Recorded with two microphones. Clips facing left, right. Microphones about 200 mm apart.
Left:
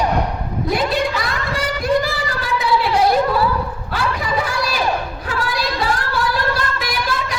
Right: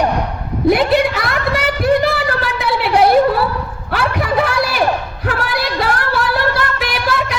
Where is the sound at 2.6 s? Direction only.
65° right (ahead or behind).